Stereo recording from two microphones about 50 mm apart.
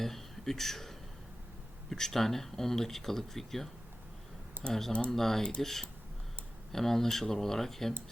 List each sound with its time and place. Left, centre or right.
0.0 s a sound: centre
1.9 s speech: centre
4.6 s speech: centre
5.1 s speech: centre